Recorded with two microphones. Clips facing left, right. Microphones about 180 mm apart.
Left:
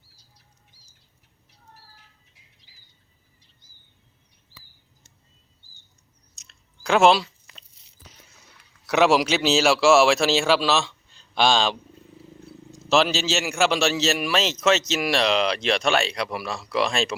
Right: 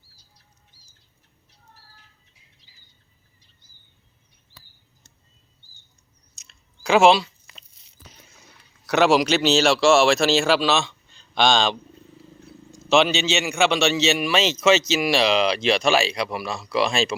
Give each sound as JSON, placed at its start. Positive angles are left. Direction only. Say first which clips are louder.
{"t": 2.6, "sound": "squawk", "louder": "even", "side_deg": 55}
{"t": 6.3, "sound": "chewing", "louder": "right 2 dB", "side_deg": 0}
{"t": 8.9, "sound": "a man's voice", "louder": "right 1 dB", "side_deg": 0}